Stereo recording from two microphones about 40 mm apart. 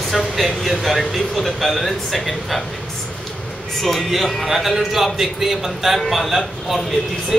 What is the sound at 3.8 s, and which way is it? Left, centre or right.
Speech, centre.